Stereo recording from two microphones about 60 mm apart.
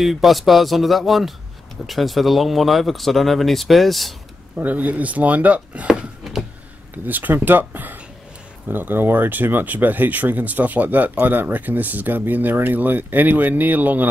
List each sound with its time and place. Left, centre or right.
0.0 s speech: centre
4.6 s speech: right
5.9 s a sound: centre
7.1 s speech: right